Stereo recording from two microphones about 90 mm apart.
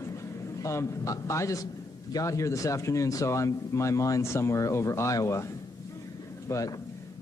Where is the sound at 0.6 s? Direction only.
35° left (ahead or behind).